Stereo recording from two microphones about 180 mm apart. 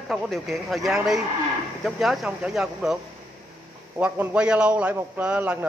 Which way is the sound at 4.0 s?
10° right (ahead or behind).